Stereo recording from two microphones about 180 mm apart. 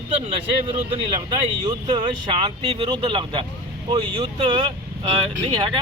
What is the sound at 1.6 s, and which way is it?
Speech, 25° right (ahead or behind).